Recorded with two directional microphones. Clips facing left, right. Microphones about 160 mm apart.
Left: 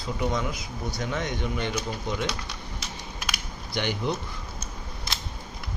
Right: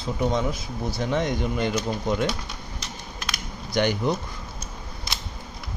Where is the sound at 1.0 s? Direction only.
30° right (ahead or behind).